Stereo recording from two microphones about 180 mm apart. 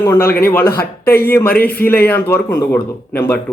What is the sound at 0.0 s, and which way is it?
Speech, 20° left (ahead or behind).